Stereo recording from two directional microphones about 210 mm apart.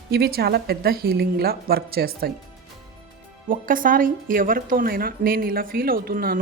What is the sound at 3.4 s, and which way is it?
A woman's voice, 40° right (ahead or behind).